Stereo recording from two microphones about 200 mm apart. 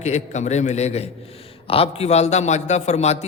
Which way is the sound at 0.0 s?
35° left (ahead or behind).